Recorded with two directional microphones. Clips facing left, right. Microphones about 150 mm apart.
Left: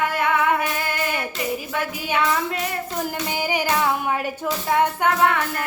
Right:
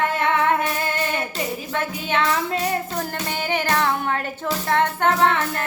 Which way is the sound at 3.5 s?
10° left (ahead or behind).